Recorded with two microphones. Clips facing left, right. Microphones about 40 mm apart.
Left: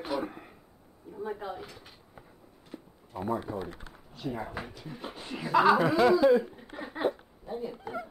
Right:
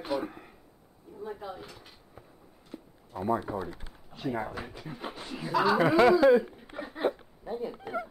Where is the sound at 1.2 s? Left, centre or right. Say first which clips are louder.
Left 3 dB; centre.